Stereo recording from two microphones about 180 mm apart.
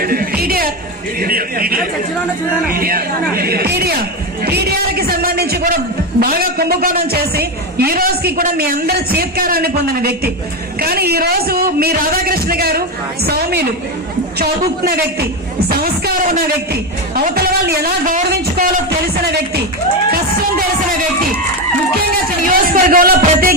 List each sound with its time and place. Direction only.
0.0 s music: 55° right (ahead or behind)
1.2 s a man's voice: 55° right (ahead or behind)
22.4 s music: 50° right (ahead or behind)